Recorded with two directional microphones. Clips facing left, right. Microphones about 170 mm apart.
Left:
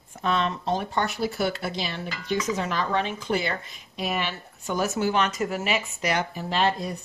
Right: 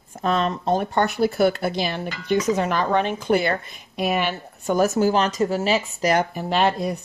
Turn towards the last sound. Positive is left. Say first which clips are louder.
# right 4 dB
turn(degrees=-60)  # may be behind; listen again after turning